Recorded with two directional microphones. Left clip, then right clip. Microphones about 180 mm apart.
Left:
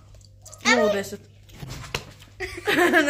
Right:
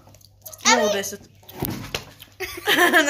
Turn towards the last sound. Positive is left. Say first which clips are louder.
# right 3 dB
turn(degrees=20)  # may be behind; listen again after turning